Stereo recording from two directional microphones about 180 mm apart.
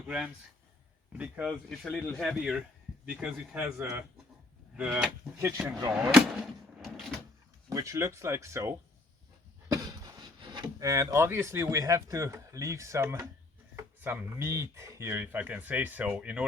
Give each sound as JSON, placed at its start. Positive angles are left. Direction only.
{"t": 1.2, "sound": "speech", "side_deg": 0}
{"t": 7.7, "sound": "speech", "side_deg": -15}